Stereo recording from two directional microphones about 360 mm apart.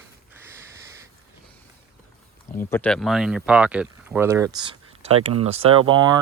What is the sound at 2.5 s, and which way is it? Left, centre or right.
Speech, centre.